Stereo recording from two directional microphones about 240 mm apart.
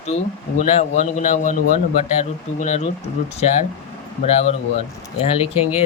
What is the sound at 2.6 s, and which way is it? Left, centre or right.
Speech, left.